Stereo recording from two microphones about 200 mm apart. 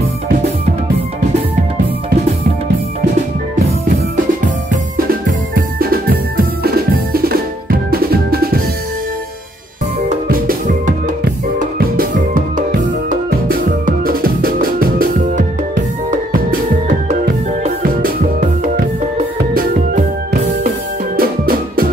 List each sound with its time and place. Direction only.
4.9 s music: 45° right (ahead or behind)
10.2 s music: 45° right (ahead or behind)
19.5 s music: 45° right (ahead or behind)
21.2 s music: 45° right (ahead or behind)